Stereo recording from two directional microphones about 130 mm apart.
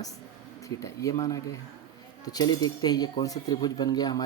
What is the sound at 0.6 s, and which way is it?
Speech, 25° left (ahead or behind).